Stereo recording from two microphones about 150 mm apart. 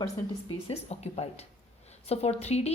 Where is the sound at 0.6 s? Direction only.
45° left (ahead or behind).